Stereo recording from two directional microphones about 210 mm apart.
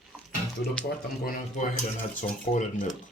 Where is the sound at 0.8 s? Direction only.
40° left (ahead or behind).